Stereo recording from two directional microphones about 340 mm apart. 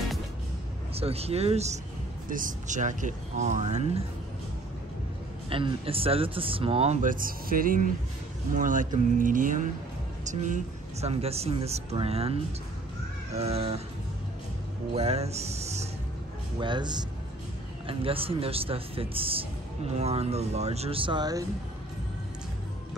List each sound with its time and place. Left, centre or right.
0.9 s speech: centre
5.5 s speech: centre
15.0 s music: centre
16.5 s speech: centre